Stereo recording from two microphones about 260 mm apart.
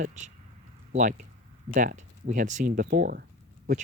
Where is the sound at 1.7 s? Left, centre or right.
Right.